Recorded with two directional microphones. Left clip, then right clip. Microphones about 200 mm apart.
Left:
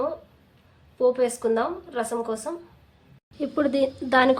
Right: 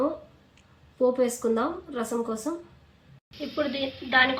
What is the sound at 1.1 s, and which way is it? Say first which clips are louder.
Speech: left 2 dB; 60° left (ahead or behind).